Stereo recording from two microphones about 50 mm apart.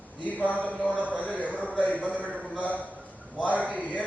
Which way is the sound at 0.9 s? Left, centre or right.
Right.